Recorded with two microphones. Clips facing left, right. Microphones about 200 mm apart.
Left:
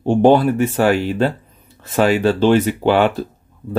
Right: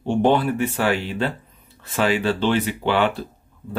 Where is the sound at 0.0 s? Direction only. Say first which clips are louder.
Left 6 dB; 40° left (ahead or behind).